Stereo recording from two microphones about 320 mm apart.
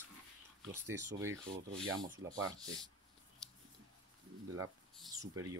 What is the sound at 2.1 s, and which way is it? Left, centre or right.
Speech, centre.